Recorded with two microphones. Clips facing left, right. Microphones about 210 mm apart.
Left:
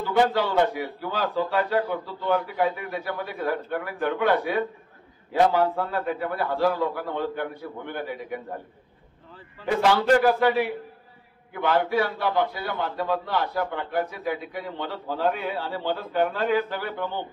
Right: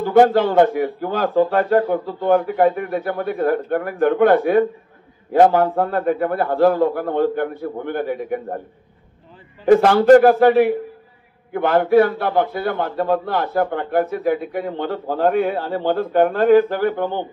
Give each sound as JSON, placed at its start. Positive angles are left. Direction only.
{"t": 0.0, "sound": "a man's voice", "side_deg": -50}
{"t": 9.7, "sound": "a man's voice", "side_deg": -50}